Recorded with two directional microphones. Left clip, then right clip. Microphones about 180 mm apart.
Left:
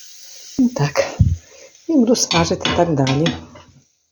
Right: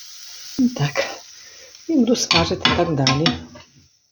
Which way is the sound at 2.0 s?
20° left (ahead or behind).